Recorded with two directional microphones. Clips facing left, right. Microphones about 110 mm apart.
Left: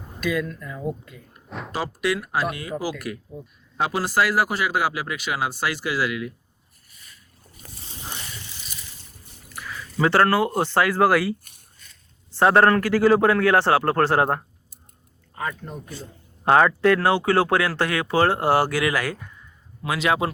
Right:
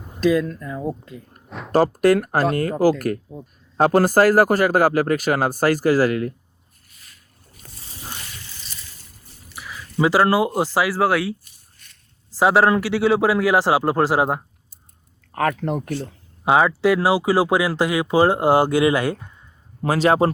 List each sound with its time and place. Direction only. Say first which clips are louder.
0.2 s speech: right 7 dB; 35° right (ahead or behind)
1.5 s a sound: left 1 dB; centre (ahead or behind)
1.7 s speech: right 10 dB; 45° right (ahead or behind)
9.5 s speech: left 1 dB; 5° right (ahead or behind)
12.4 s speech: even; 5° right (ahead or behind)
15.3 s speech: right 10 dB; 85° right
16.4 s speech: even; 5° right (ahead or behind); by 19.3 s 25° right (ahead or behind)
19.8 s speech: right 6 dB; 35° right (ahead or behind)